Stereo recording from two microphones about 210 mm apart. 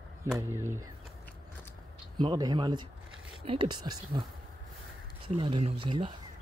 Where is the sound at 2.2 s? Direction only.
20° right (ahead or behind).